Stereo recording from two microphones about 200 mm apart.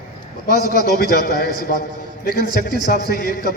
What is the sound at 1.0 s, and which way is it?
Speech, 50° left (ahead or behind).